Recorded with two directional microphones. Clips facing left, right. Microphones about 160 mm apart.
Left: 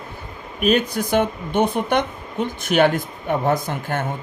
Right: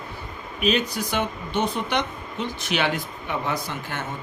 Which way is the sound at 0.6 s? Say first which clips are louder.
Left 5 dB; 50° left (ahead or behind).